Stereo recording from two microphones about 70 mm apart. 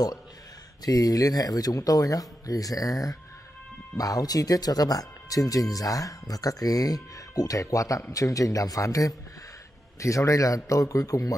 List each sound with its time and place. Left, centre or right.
0.8 s a man's voice: left